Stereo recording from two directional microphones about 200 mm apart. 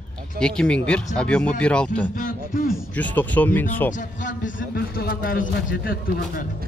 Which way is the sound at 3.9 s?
40° left (ahead or behind).